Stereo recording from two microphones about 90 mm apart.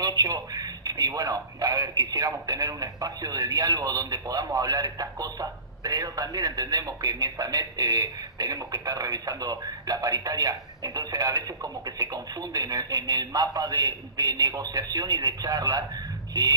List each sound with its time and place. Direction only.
0.0 s a man's voice: 45° right (ahead or behind)